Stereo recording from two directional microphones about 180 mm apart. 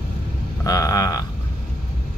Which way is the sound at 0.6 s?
20° left (ahead or behind).